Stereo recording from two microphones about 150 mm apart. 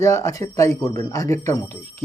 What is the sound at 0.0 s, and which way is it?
Speech, 20° left (ahead or behind).